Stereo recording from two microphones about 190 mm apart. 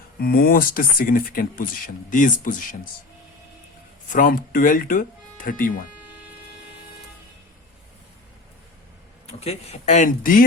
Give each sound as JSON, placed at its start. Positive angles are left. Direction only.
{"t": 0.2, "sound": "speech", "side_deg": 50}
{"t": 4.1, "sound": "speech", "side_deg": 45}
{"t": 9.2, "sound": "speech", "side_deg": 35}